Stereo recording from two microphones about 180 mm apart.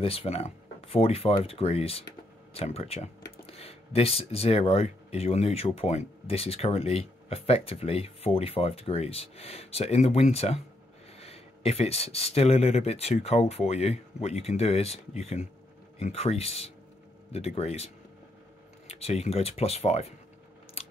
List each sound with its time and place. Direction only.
0.0 s speech: 30° left (ahead or behind)
20.8 s biting: 35° left (ahead or behind)